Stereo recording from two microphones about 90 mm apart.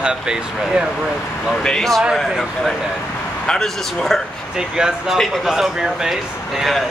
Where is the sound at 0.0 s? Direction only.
10° right (ahead or behind).